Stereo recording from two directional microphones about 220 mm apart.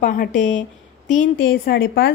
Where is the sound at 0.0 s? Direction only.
35° left (ahead or behind).